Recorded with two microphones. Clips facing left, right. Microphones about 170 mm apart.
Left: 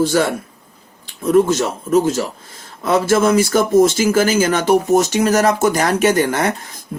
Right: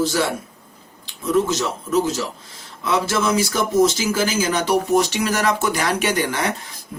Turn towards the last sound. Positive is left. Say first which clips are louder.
# left 6 dB
turn(degrees=45)  # may be behind; listen again after turning